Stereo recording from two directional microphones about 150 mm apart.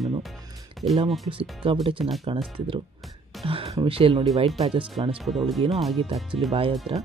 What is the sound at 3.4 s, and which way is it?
Speech, 40° right (ahead or behind).